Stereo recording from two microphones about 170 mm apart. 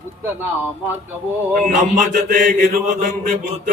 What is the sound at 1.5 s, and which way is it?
Mantra, 50° right (ahead or behind).